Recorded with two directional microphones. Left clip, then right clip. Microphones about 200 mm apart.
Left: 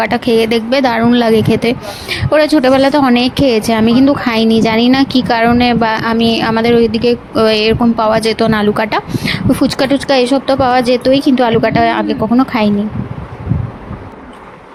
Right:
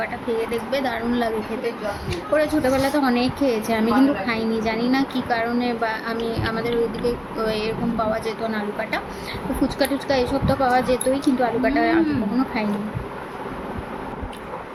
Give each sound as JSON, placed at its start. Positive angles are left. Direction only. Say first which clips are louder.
{"t": 0.0, "sound": "speech", "louder": "left 13 dB", "side_deg": 50}
{"t": 2.3, "sound": "speech", "louder": "left 10 dB", "side_deg": 45}